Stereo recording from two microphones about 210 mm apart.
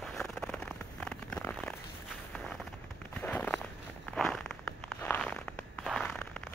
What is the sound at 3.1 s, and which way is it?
Walk, 5° left (ahead or behind).